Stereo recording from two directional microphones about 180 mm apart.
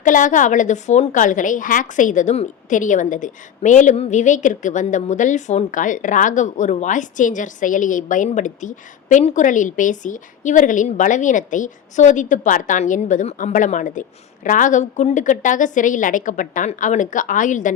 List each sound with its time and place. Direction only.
0.0 s a woman's voice: 45° left (ahead or behind)